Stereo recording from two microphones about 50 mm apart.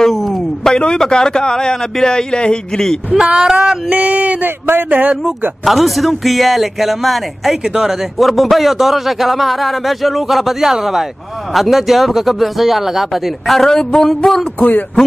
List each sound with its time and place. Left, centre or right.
0.0 s a sound: centre
0.7 s a man's voice: centre
3.4 s a sound: centre
3.9 s speech: right
4.5 s speech: right
4.8 s speech: right
5.6 s a man's voice: centre
14.6 s speech: left